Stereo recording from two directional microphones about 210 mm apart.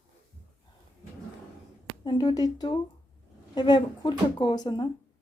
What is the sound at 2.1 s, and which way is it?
Speech, 20° left (ahead or behind).